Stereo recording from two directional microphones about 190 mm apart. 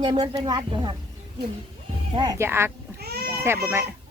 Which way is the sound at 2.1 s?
20° right (ahead or behind).